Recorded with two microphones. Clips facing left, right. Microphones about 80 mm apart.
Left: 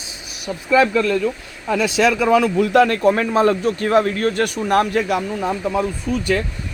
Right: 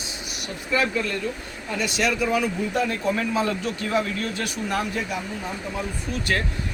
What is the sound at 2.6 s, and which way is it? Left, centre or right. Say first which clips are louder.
Speech: left 10 dB; left.